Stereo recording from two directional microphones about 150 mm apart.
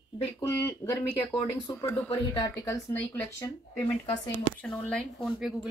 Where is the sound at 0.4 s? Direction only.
15° left (ahead or behind).